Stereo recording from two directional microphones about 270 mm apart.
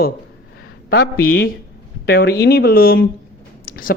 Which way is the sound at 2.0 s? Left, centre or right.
Left.